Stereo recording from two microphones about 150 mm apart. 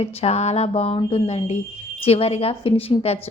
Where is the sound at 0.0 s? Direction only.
45° left (ahead or behind).